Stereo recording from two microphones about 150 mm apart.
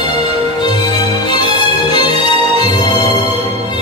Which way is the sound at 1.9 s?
30° left (ahead or behind).